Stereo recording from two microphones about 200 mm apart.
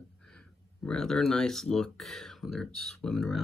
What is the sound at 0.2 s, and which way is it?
Speech, 5° left (ahead or behind).